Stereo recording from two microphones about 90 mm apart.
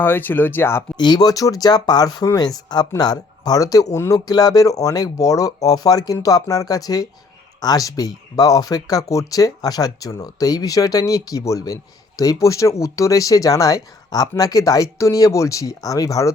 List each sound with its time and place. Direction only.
0.0 s speech: 20° left (ahead or behind)
0.9 s speech: 50° left (ahead or behind)